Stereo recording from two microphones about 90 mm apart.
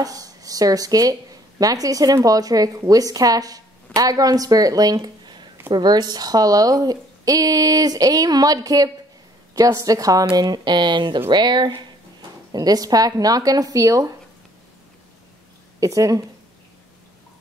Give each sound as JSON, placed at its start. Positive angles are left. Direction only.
{"t": 0.0, "sound": "a woman's voice", "side_deg": -40}
{"t": 12.5, "sound": "speech", "side_deg": -45}
{"t": 15.8, "sound": "a woman's voice", "side_deg": -40}